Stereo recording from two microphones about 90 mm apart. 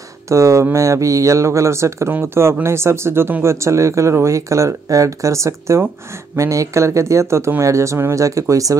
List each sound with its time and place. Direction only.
0.3 s speech: 35° right (ahead or behind)